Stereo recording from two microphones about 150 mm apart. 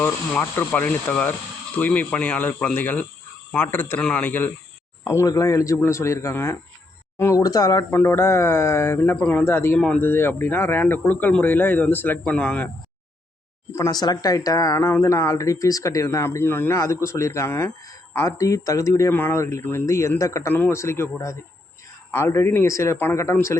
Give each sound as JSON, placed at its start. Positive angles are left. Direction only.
{"t": 0.0, "sound": "speech", "side_deg": 10}
{"t": 13.7, "sound": "speech", "side_deg": 25}